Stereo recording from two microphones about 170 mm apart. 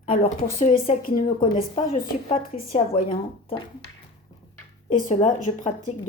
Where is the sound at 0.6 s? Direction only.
35° left (ahead or behind).